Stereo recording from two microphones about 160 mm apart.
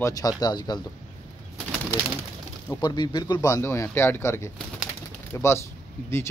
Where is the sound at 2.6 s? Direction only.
25° left (ahead or behind).